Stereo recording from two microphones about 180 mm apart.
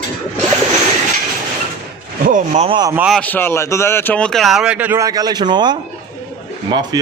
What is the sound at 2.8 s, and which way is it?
Speech, 15° right (ahead or behind).